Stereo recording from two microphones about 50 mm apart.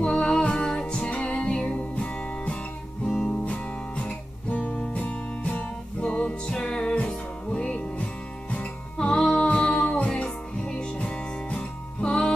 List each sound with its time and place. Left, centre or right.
0.0 s music: left